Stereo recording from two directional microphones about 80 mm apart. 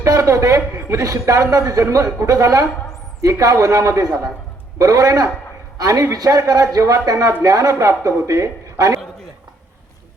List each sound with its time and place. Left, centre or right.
0.0 s a man's voice: right